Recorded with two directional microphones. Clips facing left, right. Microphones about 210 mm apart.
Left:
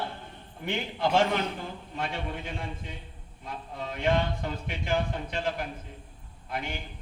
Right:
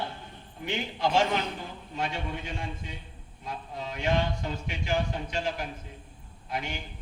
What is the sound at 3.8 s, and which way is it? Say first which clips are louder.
A man's voice: left 1 dB; 55° left (ahead or behind).